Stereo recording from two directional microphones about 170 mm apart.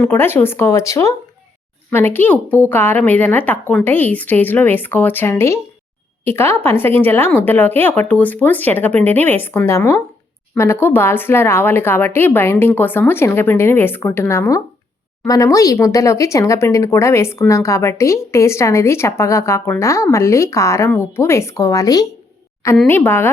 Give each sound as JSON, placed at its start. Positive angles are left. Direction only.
{"t": 0.0, "sound": "speech", "side_deg": 10}